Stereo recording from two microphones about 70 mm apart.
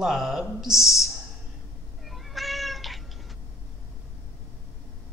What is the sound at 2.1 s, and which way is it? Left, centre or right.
Cat, centre.